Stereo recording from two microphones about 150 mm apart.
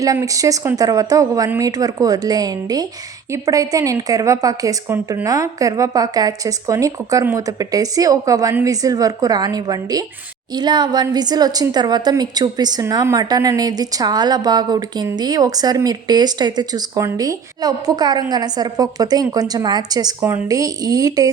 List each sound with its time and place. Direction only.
0.0 s a woman's voice: 20° right (ahead or behind)